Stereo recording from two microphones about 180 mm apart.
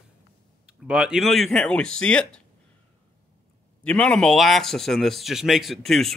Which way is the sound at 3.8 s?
5° left (ahead or behind).